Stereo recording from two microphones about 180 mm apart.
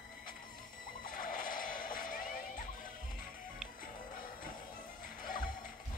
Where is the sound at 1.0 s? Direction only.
50° left (ahead or behind).